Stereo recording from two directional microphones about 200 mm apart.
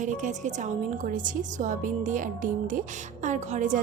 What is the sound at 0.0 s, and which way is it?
A woman's voice, 40° right (ahead or behind).